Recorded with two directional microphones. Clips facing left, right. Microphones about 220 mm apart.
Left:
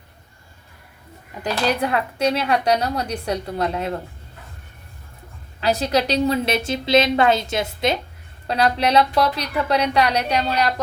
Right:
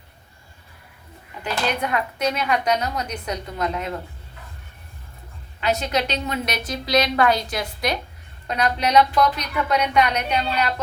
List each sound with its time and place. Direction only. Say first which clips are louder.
1.8 s a woman's voice: left 3 dB; 30° left (ahead or behind)
5.5 s a woman's voice: left 3 dB; 35° left (ahead or behind)